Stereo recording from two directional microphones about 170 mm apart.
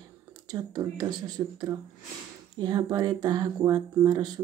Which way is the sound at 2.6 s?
25° right (ahead or behind).